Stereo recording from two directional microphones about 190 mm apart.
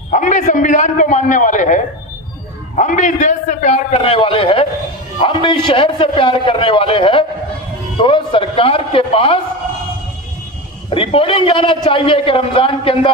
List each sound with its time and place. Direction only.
0.1 s a man's voice: 40° left (ahead or behind)
10.9 s a man's voice: 30° left (ahead or behind)